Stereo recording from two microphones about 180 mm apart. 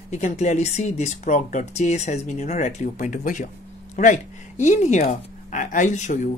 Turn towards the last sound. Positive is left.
turn(degrees=40)  # may be behind; listen again after turning